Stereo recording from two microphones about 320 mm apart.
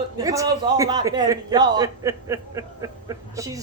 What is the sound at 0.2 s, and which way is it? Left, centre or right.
A man's voice, centre.